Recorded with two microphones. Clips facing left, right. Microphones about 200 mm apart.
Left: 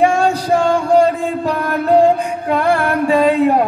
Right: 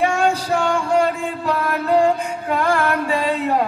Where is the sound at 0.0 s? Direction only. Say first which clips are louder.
Left 4 dB; 35° left (ahead or behind).